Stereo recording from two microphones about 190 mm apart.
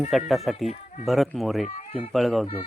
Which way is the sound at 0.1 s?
Centre (ahead or behind).